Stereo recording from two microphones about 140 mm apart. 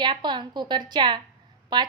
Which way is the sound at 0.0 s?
35° right (ahead or behind).